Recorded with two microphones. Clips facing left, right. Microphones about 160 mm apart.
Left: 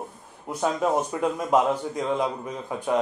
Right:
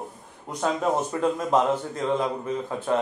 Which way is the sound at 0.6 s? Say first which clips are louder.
Left 1 dB; 10° left (ahead or behind).